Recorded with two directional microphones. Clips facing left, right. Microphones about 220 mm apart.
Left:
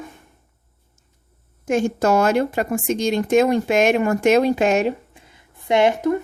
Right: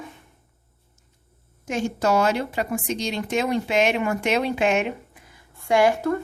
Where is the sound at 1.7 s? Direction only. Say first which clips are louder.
Left 5 dB; 50° left (ahead or behind).